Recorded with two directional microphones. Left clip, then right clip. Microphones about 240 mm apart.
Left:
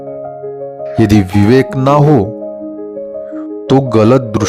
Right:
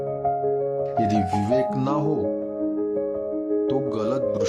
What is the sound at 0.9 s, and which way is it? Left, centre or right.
Speech, left.